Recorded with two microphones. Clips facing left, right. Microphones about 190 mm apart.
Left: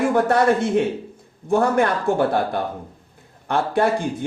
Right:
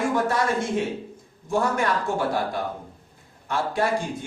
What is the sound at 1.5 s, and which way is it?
Speech, 60° left (ahead or behind).